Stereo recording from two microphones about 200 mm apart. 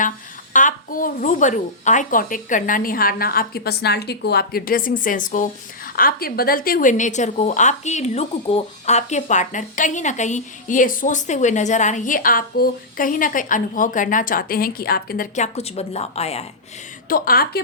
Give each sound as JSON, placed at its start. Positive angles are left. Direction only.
{"t": 0.5, "sound": "a woman's voice", "side_deg": 40}
{"t": 15.5, "sound": "a woman's voice", "side_deg": 30}
{"t": 17.1, "sound": "a woman's voice", "side_deg": 45}